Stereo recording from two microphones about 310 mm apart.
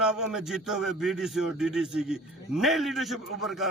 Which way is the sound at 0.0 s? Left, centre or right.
Centre.